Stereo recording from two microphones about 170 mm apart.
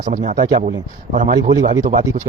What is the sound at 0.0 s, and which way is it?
Speech, 45° right (ahead or behind).